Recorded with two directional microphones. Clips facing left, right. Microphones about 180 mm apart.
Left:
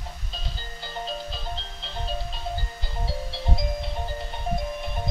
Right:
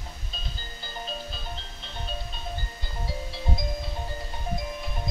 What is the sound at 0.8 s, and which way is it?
Music, 30° left (ahead or behind).